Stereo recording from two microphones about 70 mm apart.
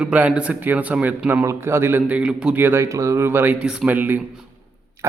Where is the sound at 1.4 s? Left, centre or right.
Right.